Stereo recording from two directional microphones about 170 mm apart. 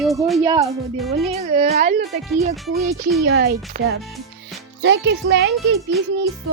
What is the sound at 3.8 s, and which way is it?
Speech, 55° right (ahead or behind).